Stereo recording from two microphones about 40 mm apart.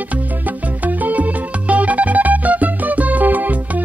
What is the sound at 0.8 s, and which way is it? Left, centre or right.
Music, right.